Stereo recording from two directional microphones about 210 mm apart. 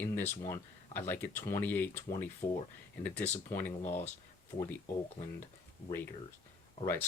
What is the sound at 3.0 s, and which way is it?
Speech, 10° left (ahead or behind).